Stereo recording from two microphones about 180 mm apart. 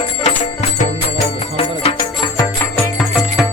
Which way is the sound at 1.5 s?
30° left (ahead or behind).